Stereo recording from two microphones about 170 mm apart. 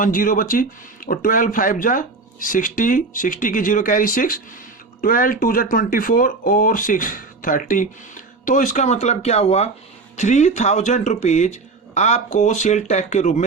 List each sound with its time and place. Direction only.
0.0 s speech: 55° left (ahead or behind)